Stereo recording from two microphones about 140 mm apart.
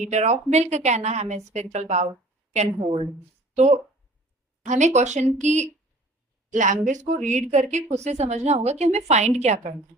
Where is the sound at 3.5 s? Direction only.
55° right (ahead or behind).